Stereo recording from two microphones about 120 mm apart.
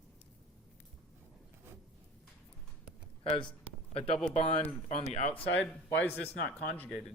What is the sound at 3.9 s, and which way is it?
Speech, 55° left (ahead or behind).